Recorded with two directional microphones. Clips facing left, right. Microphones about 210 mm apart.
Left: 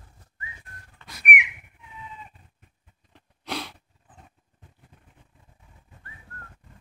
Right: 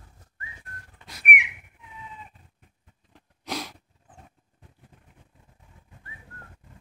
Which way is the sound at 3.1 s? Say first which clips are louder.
Even; 5° right (ahead or behind).